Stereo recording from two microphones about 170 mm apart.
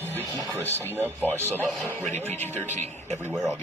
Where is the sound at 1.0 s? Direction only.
10° left (ahead or behind).